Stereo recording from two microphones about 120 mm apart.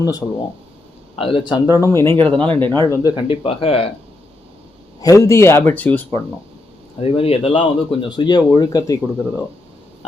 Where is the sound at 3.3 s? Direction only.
50° left (ahead or behind).